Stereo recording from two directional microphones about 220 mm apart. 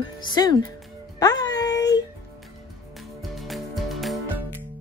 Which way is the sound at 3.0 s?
Centre (ahead or behind).